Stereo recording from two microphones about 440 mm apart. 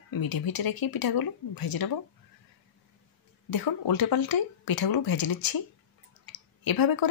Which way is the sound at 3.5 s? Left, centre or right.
Left.